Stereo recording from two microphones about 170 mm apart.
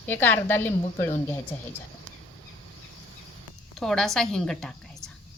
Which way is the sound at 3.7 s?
Centre (ahead or behind).